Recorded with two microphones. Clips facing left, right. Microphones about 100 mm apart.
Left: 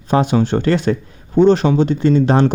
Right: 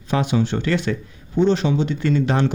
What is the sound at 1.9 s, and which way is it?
Speech, 30° left (ahead or behind).